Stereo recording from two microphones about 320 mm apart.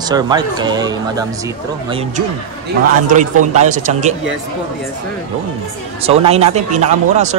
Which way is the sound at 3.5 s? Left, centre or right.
Right.